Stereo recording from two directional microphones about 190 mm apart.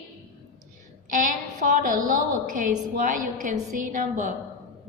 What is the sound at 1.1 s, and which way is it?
A woman's voice, 45° right (ahead or behind).